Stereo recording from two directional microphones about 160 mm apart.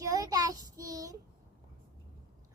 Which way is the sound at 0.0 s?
20° right (ahead or behind).